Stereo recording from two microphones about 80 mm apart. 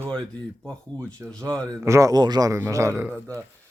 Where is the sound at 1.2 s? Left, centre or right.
Right.